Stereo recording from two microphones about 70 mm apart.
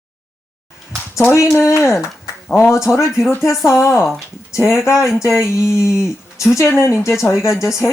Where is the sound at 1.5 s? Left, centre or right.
Left.